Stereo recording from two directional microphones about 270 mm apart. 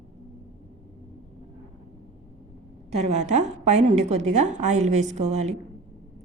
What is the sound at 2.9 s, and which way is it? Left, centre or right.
A woman's voice, right.